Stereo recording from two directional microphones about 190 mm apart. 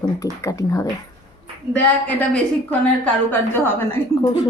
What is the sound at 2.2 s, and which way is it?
A woman's voice, 10° left (ahead or behind).